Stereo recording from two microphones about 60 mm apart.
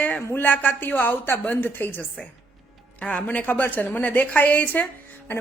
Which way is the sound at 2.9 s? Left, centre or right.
Left.